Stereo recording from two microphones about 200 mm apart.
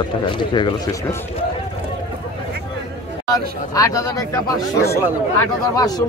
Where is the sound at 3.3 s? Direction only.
15° left (ahead or behind).